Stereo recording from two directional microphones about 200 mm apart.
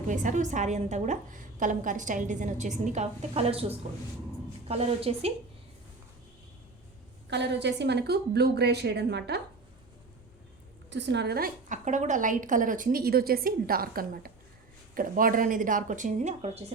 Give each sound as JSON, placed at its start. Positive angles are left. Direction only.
{"t": 0.1, "sound": "a woman's voice", "side_deg": -40}
{"t": 7.3, "sound": "a woman's voice", "side_deg": -60}
{"t": 10.8, "sound": "a woman's voice", "side_deg": -60}